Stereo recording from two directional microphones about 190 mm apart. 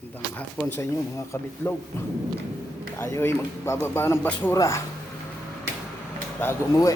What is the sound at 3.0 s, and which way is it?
Speech, 15° left (ahead or behind).